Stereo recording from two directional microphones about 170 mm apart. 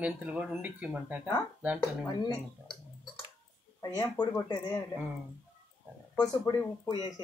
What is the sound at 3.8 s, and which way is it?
Speech, 20° left (ahead or behind).